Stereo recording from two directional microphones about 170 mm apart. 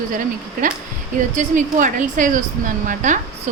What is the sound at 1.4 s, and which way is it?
A woman's voice, 50° right (ahead or behind).